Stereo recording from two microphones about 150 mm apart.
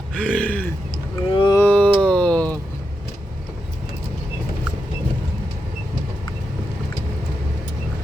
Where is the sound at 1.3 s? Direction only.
35° left (ahead or behind).